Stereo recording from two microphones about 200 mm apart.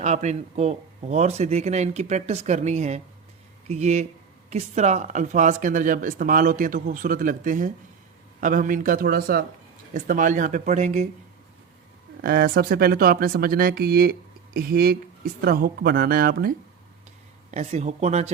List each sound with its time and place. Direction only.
0.0 s speech: 35° right (ahead or behind)
12.2 s speech: 50° right (ahead or behind)
17.5 s speech: 35° right (ahead or behind)